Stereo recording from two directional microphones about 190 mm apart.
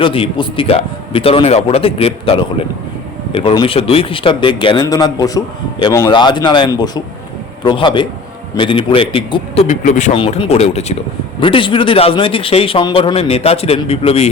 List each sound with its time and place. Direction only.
0.0 s a man's voice: 30° left (ahead or behind)
10.2 s a man's voice: 25° left (ahead or behind)